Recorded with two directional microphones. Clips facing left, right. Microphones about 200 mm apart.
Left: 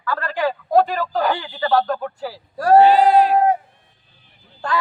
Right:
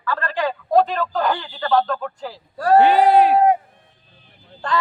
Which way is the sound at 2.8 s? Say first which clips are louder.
Right 1 dB; 60° right (ahead or behind).